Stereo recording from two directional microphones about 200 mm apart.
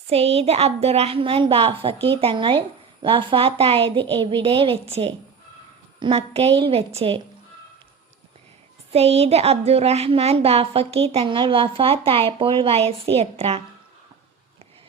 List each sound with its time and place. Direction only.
0.1 s a woman's voice: 30° right (ahead or behind)
8.9 s a woman's voice: 30° right (ahead or behind)